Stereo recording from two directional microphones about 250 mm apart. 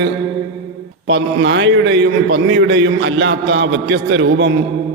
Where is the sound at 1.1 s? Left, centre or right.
Right.